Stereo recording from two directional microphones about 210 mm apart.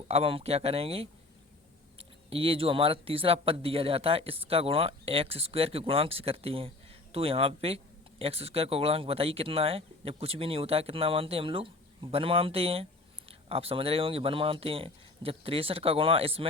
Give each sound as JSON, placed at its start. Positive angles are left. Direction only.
{"t": 0.1, "sound": "speech", "side_deg": -25}